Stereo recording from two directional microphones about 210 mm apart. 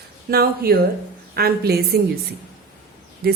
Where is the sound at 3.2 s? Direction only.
45° right (ahead or behind).